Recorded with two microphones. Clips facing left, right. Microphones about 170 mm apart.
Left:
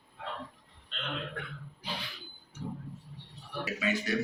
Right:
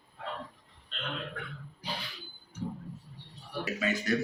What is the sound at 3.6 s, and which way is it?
Speech, 45° right (ahead or behind).